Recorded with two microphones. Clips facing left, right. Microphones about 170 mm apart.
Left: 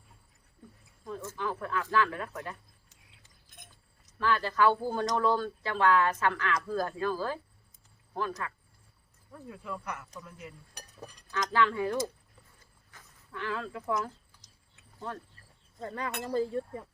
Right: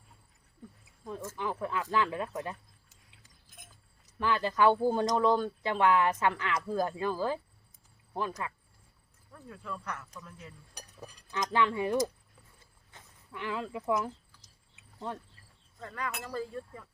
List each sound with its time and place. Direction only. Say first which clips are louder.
1.0 s speech: even; 15° right (ahead or behind)
4.2 s speech: even; 20° right (ahead or behind)
8.4 s speech: even; 15° right (ahead or behind)
9.5 s speech: left 1 dB; 15° left (ahead or behind)
11.3 s speech: left 1 dB; 20° right (ahead or behind)
12.9 s sheep: left 1 dB; 20° right (ahead or behind)
14.9 s speech: right 1 dB; 15° right (ahead or behind)
15.8 s speech: left 3 dB; 30° left (ahead or behind)